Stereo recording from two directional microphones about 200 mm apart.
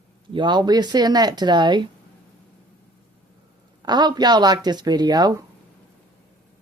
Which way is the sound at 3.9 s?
20° right (ahead or behind).